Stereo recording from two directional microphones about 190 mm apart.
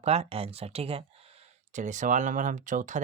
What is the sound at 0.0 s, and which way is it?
Speech, 30° right (ahead or behind).